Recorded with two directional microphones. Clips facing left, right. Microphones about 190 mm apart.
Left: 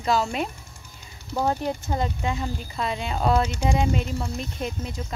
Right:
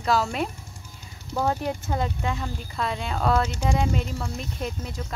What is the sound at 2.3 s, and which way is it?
Speech, 15° left (ahead or behind).